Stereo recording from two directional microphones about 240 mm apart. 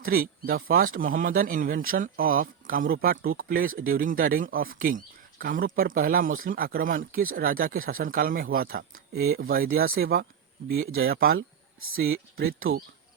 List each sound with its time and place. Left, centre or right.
0.0 s speech: right
10.7 s speech: right
11.1 s speech: right
11.8 s speech: right